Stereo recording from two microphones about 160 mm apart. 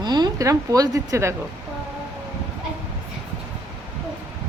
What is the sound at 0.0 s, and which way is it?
Speech, 25° right (ahead or behind).